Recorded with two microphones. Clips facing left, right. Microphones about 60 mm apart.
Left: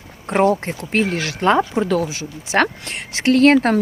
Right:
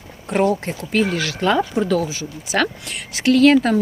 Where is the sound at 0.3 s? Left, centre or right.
Left.